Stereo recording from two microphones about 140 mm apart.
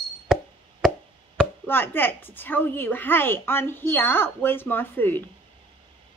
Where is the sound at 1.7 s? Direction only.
15° left (ahead or behind).